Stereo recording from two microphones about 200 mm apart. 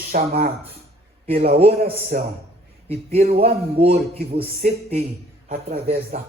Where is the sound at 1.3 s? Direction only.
30° right (ahead or behind).